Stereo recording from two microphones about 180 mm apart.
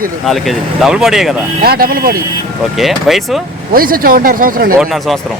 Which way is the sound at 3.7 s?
55° right (ahead or behind).